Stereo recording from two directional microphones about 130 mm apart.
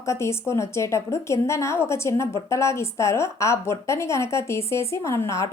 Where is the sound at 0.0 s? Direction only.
20° left (ahead or behind).